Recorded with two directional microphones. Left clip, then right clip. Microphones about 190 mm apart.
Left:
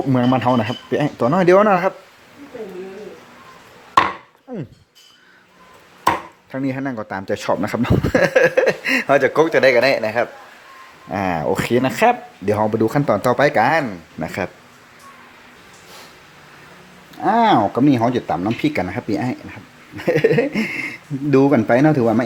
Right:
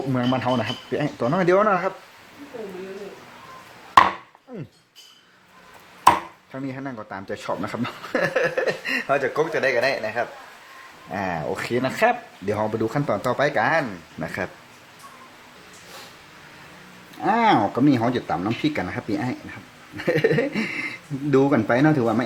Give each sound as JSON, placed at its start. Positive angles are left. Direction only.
{"t": 0.1, "sound": "speech", "side_deg": 30}
{"t": 4.5, "sound": "speech", "side_deg": 25}
{"t": 6.5, "sound": "speech", "side_deg": 30}
{"t": 17.2, "sound": "speech", "side_deg": 15}